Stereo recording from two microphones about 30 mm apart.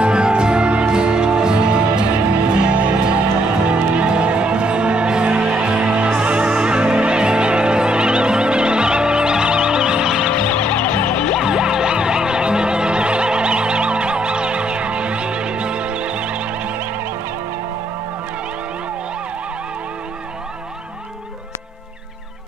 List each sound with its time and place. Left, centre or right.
0.0 s music: right; by 10.3 s centre
10.5 s music: left
11.4 s music: right